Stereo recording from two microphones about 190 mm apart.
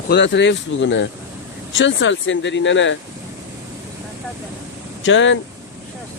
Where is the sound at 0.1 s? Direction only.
70° left (ahead or behind).